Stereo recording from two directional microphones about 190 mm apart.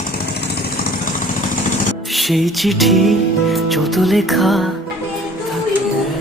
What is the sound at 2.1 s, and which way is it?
Music, centre (ahead or behind).